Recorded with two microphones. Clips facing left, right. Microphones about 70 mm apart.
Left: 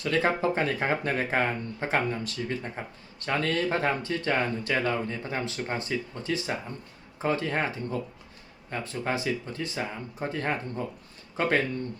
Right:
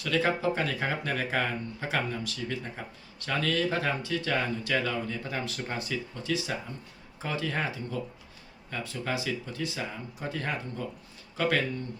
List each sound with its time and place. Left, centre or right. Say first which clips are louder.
0.0 s speech: left 2 dB; left